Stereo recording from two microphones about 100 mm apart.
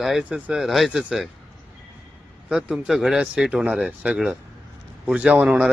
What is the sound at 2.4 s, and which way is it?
Speech, 10° right (ahead or behind).